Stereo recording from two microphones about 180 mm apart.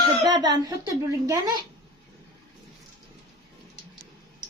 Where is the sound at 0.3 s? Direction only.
25° right (ahead or behind).